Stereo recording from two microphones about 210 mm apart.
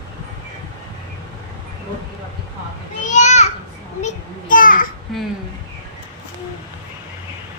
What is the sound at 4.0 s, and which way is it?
Speech, 35° left (ahead or behind).